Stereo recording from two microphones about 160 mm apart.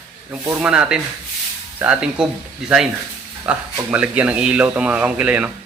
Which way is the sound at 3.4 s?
10° right (ahead or behind).